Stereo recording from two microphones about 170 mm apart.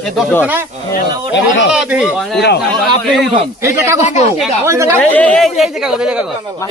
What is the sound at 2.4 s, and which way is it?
Speech, 75° left (ahead or behind).